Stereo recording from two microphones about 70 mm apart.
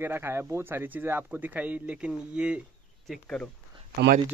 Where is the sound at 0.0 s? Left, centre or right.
Right; by 2.6 s centre.